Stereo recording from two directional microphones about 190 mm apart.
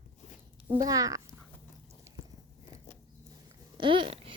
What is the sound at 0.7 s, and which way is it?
Speech, 20° right (ahead or behind).